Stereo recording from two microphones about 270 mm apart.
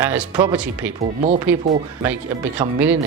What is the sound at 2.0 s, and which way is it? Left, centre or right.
Speech, centre.